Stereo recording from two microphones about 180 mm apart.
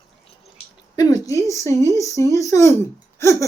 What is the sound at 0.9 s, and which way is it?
Speech, 20° left (ahead or behind).